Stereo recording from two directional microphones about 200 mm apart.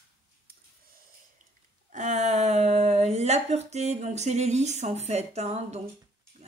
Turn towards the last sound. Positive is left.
turn(degrees=-35)  # may be behind; listen again after turning